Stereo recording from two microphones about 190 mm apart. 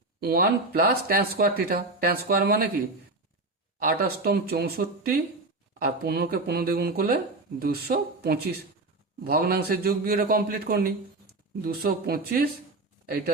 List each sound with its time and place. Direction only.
0.2 s speech: 55° right (ahead or behind)
3.8 s speech: 50° right (ahead or behind)